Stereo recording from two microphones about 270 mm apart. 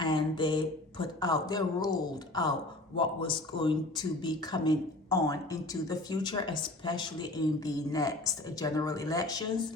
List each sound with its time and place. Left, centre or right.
0.0 s speech: centre